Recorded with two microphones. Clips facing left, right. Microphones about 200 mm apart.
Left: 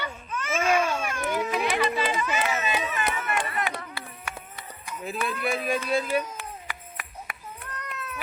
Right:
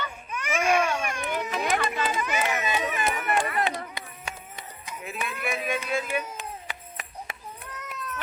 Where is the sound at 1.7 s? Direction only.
45° right (ahead or behind).